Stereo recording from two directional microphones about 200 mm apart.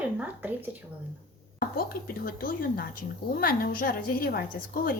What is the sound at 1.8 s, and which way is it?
A woman's voice, 45° left (ahead or behind).